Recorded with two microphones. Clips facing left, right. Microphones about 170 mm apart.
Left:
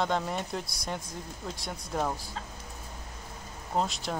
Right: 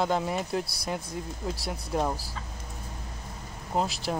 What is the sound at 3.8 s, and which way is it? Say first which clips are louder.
Speech: right 2 dB; 5° right (ahead or behind).